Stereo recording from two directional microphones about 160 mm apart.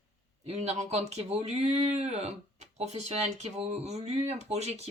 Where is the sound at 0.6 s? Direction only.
45° right (ahead or behind).